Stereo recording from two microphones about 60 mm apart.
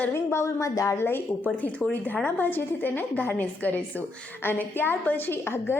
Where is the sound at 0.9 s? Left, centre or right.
Left.